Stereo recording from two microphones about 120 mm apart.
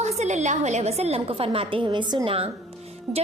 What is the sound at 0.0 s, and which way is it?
A woman's voice, 70° right (ahead or behind).